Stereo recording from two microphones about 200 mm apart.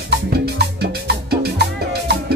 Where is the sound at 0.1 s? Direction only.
55° right (ahead or behind).